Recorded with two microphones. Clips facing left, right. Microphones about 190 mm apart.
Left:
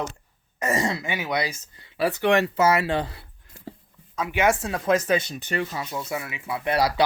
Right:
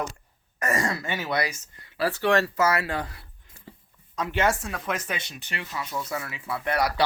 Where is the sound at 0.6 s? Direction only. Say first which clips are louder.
Left 2 dB; 25° left (ahead or behind).